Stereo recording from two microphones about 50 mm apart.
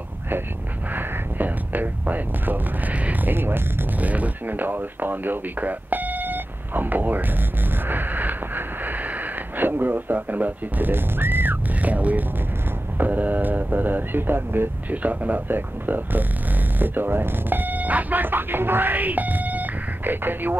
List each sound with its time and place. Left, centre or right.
0.9 s a sound: right
3.3 s speech: right
4.0 s speech: right
7.9 s a sound: right
9.6 s speech: right
11.8 s speech: right
15.0 s speech: right